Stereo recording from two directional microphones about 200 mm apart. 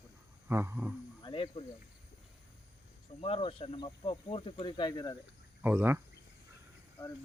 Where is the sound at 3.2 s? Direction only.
25° left (ahead or behind).